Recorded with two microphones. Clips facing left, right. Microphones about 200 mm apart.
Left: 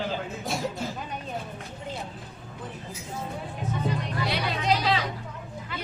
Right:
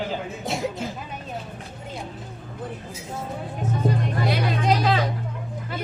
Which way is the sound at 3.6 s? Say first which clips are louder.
Right 5 dB; 45° right (ahead or behind).